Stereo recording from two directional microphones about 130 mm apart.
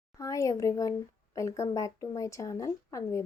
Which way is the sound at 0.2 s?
25° left (ahead or behind).